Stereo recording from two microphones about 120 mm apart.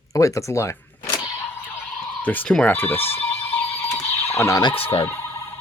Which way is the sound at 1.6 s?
15° left (ahead or behind).